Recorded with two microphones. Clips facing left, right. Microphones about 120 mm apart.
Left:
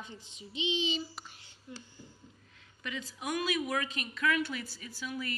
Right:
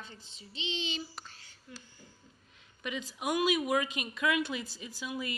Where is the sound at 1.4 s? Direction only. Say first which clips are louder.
Left 3 dB; 25° left (ahead or behind).